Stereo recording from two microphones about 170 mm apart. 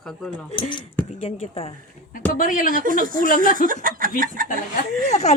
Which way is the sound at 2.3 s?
55° left (ahead or behind).